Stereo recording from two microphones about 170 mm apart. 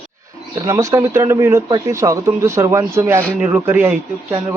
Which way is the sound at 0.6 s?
20° right (ahead or behind).